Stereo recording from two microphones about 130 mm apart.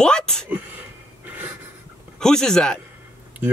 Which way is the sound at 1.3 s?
10° right (ahead or behind).